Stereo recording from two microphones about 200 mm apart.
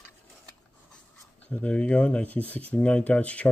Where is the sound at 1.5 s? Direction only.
5° left (ahead or behind).